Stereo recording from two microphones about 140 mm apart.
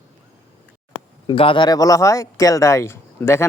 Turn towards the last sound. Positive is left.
turn(degrees=20)  # may be behind; listen again after turning